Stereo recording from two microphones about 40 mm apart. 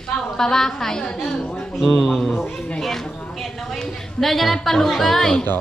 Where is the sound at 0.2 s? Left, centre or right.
Centre.